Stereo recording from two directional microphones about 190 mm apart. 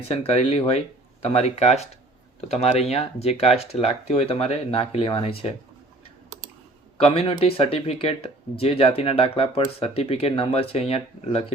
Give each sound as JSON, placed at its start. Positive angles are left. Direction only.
{"t": 0.1, "sound": "speech", "side_deg": 30}
{"t": 7.0, "sound": "speech", "side_deg": 30}